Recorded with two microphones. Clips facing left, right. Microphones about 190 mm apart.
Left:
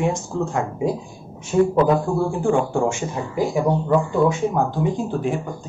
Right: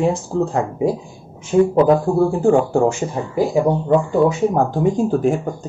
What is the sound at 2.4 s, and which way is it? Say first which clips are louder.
Speech: right 4 dB; 40° right (ahead or behind).